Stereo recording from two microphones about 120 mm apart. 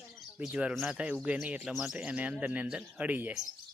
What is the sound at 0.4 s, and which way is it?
Speech, 5° right (ahead or behind).